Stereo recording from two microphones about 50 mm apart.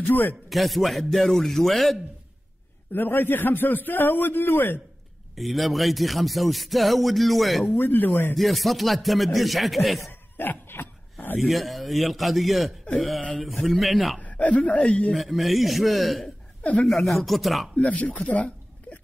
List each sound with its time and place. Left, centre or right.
0.0 s a man's voice: left
0.5 s speech: centre
2.9 s a man's voice: left
5.3 s speech: centre
7.6 s a man's voice: left
8.4 s speech: centre
10.3 s a sound: left
11.4 s speech: centre
14.2 s a sound: left
14.7 s speech: left
15.3 s speech: centre
17.7 s speech: left